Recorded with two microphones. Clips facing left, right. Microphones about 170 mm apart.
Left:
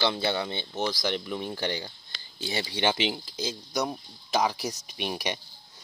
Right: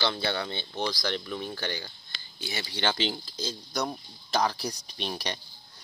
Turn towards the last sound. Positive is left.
turn(degrees=10)  # may be behind; listen again after turning